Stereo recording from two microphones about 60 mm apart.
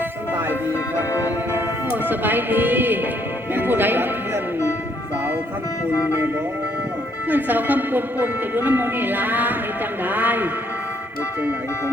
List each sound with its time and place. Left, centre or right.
0.7 s music: left
1.5 s speech: right
5.9 s music: left
7.3 s speech: right